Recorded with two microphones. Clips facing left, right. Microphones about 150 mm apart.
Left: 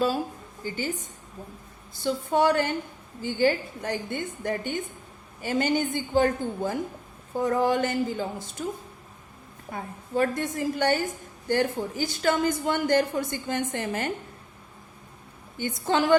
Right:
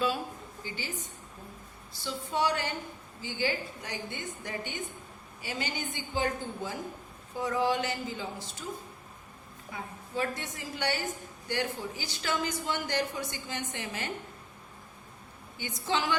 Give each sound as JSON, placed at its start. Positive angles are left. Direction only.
{"t": 0.6, "sound": "a woman's voice", "side_deg": 45}
{"t": 9.7, "sound": "a woman's voice", "side_deg": 50}
{"t": 15.5, "sound": "a woman's voice", "side_deg": 50}